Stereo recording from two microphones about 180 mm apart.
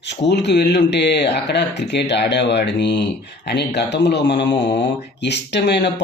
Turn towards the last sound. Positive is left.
turn(degrees=75)  # may be behind; listen again after turning